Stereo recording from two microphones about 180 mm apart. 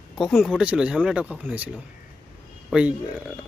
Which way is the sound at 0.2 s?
Centre (ahead or behind).